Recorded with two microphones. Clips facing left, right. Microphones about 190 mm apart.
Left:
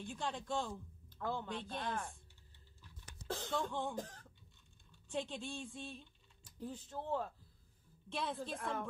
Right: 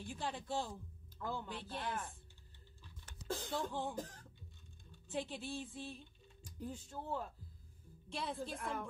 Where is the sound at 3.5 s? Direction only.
5° right (ahead or behind).